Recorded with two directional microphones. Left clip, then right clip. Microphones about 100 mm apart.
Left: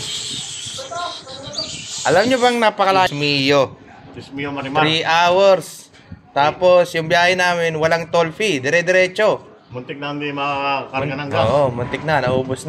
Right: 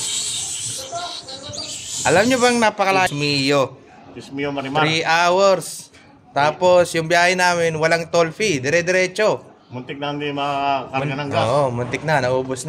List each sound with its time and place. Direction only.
1.7 s bird: 90° right
2.1 s speech: 50° right (ahead or behind)
2.6 s speech: 20° right (ahead or behind)
3.1 s speech: 30° right (ahead or behind)
4.4 s speech: 60° right (ahead or behind)
9.9 s a man's voice: 80° right; by 12.5 s 45° right (ahead or behind)